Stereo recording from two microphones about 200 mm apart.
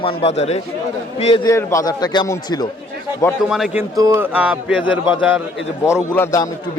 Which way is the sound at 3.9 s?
15° right (ahead or behind).